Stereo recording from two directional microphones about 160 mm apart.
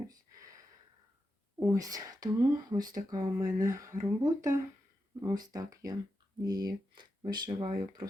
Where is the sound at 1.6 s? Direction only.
20° right (ahead or behind).